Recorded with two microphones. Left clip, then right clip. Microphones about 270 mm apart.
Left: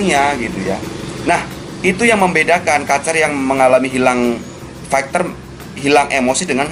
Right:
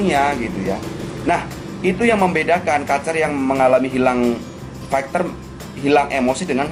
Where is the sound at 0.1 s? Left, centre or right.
Centre.